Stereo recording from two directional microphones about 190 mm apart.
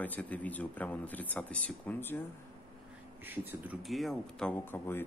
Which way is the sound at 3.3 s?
5° right (ahead or behind).